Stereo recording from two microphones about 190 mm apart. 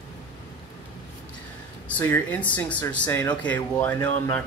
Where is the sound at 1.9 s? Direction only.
10° left (ahead or behind).